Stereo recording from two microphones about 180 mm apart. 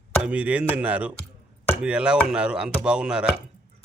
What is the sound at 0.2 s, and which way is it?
Speech, 5° right (ahead or behind).